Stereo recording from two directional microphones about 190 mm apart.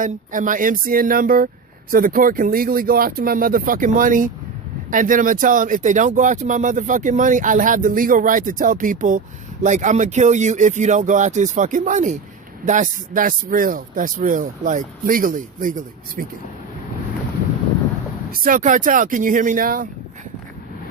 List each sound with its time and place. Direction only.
0.0 s speech: 45° right (ahead or behind)
18.3 s speech: 50° right (ahead or behind)